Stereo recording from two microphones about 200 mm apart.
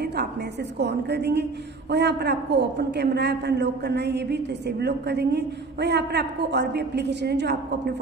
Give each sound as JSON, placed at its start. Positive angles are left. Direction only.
{"t": 0.0, "sound": "a woman's voice", "side_deg": -55}